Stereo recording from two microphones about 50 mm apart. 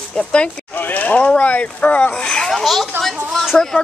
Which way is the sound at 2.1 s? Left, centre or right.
Centre.